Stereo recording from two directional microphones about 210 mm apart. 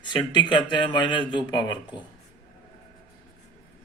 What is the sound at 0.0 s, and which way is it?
Speech, 20° left (ahead or behind).